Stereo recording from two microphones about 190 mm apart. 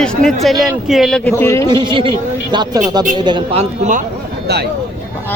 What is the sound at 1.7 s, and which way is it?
Speech, 25° right (ahead or behind).